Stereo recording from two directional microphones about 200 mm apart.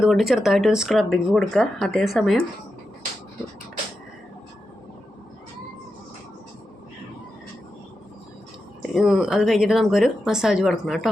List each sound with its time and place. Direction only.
0.0 s speech: centre (ahead or behind)
8.9 s speech: centre (ahead or behind)